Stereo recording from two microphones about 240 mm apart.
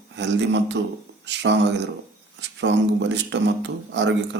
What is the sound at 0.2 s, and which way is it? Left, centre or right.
Speech, right.